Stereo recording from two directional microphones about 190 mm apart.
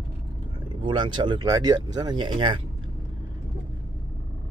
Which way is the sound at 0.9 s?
25° right (ahead or behind).